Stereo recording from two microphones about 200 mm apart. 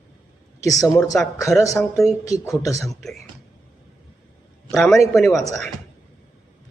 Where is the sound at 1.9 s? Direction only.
Centre (ahead or behind).